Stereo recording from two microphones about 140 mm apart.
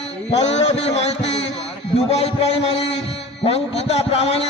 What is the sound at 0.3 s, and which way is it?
A man's voice, 50° left (ahead or behind).